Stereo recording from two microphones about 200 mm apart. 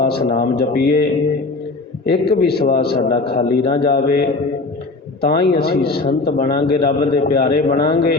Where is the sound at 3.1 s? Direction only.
25° left (ahead or behind).